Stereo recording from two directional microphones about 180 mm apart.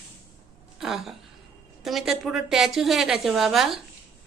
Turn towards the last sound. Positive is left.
turn(degrees=0)  # may be behind; listen again after turning